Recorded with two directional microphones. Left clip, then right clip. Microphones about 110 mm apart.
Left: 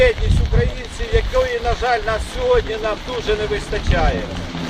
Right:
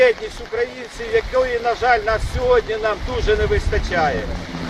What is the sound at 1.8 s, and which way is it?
Speech, 25° right (ahead or behind).